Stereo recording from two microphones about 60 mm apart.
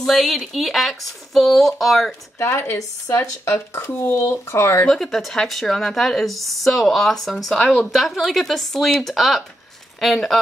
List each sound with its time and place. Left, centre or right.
0.0 s speech: centre
2.3 s speech: left
4.8 s speech: centre
7.5 s speech: centre
7.9 s speech: centre